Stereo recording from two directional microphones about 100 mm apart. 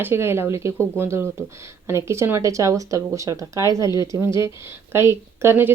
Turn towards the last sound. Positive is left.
turn(degrees=-20)  # may be behind; listen again after turning